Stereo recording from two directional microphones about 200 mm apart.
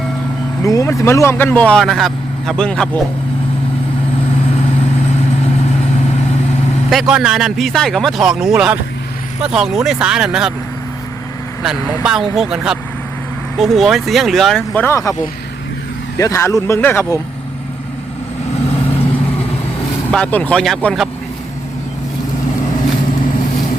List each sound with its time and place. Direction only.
0.6 s speech: 15° left (ahead or behind)
6.9 s a man's voice: centre (ahead or behind)
12.0 s a man's voice: centre (ahead or behind); by 15.1 s 15° left (ahead or behind)
16.1 s speech: 15° left (ahead or behind)
20.1 s a man's voice: 5° left (ahead or behind)